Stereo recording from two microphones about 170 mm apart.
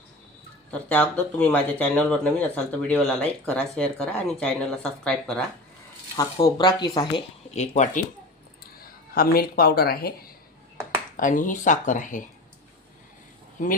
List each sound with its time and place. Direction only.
0.7 s speech: 10° left (ahead or behind)
6.4 s speech: 25° left (ahead or behind)
7.5 s speech: 40° left (ahead or behind)
8.8 s speech: 60° left (ahead or behind)
11.2 s speech: 50° left (ahead or behind)
13.6 s speech: 45° left (ahead or behind)